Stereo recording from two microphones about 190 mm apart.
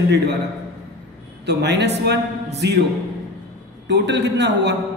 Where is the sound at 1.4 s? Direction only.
65° right (ahead or behind).